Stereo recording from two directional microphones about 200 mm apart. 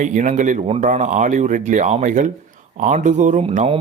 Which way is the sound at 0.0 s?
40° right (ahead or behind).